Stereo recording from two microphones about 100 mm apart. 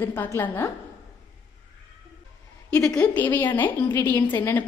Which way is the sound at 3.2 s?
20° left (ahead or behind).